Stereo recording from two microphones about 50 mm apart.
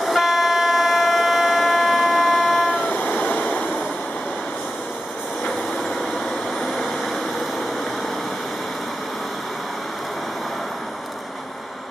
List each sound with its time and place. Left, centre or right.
0.0 s vehicle: centre
2.9 s vehicle: left
6.6 s vehicle: centre